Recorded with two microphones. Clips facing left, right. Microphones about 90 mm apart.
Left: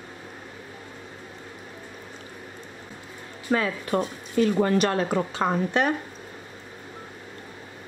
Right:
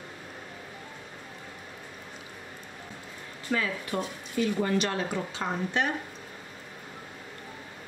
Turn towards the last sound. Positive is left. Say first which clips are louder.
# left 6 dB
turn(degrees=55)  # may be behind; listen again after turning